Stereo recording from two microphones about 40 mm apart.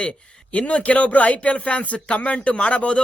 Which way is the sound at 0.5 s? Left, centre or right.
Left.